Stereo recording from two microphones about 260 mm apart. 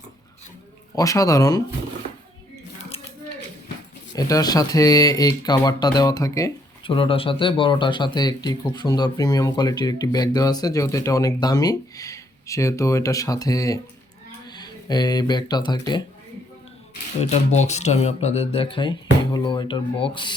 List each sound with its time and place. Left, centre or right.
0.9 s speech: centre
4.1 s speech: centre
17.5 s speech: left